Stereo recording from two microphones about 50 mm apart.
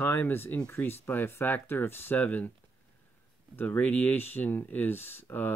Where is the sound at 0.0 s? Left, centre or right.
Left.